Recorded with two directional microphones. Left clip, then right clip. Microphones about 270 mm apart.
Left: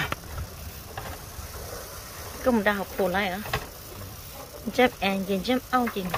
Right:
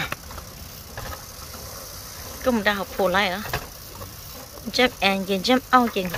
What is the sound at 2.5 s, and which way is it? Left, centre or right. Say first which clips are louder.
Speech: right 2 dB; centre.